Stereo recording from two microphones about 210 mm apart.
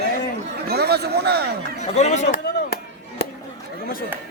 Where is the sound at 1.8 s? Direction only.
30° left (ahead or behind).